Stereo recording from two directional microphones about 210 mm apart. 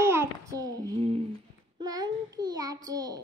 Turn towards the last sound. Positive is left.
turn(degrees=-15)  # may be behind; listen again after turning